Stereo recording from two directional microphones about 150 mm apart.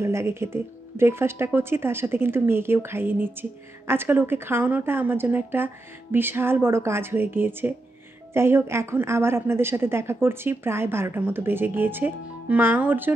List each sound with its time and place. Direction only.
0.0 s speech: 15° right (ahead or behind)